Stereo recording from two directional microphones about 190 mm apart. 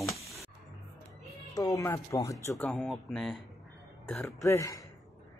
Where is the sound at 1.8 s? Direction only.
15° left (ahead or behind).